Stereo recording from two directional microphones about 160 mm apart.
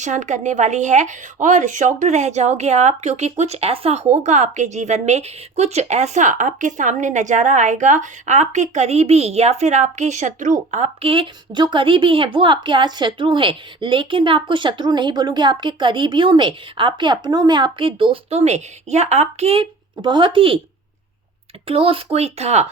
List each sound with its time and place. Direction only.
0.0 s a woman's voice: 50° right (ahead or behind); by 20.6 s 35° right (ahead or behind)
21.7 s speech: 35° right (ahead or behind)